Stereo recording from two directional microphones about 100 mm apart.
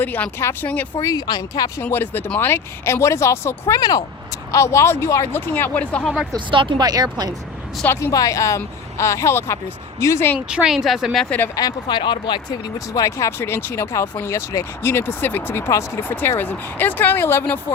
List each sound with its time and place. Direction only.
0.0 s speech: 15° left (ahead or behind)
0.9 s speech: 40° left (ahead or behind)
1.8 s speech: 20° left (ahead or behind)
3.8 s speech: 40° left (ahead or behind)
4.5 s speech: 30° left (ahead or behind); by 6.1 s 10° left (ahead or behind)
6.3 s speech: 55° right (ahead or behind)
8.1 s speech: 35° left (ahead or behind)
10.5 s a woman's voice: 5° right (ahead or behind)
11.3 s speech: 20° left (ahead or behind)
11.5 s speech: 45° left (ahead or behind); by 17.4 s 25° left (ahead or behind)